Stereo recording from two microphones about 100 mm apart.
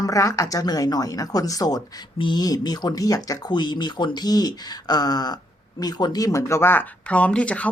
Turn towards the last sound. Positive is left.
turn(degrees=15)  # may be behind; listen again after turning